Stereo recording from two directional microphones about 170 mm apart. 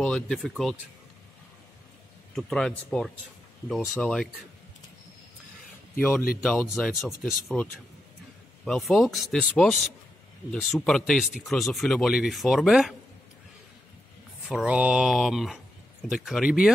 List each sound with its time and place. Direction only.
0.0 s speech: 5° left (ahead or behind)
2.3 s speech: 5° left (ahead or behind)
5.9 s speech: 10° left (ahead or behind)
8.6 s speech: centre (ahead or behind)
14.5 s speech: 5° right (ahead or behind)